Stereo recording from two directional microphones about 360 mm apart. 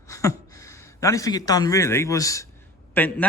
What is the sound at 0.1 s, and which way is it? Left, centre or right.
A man's voice, centre.